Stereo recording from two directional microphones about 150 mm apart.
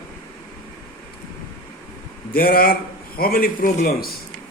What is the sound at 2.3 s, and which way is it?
A man's voice, 80° left.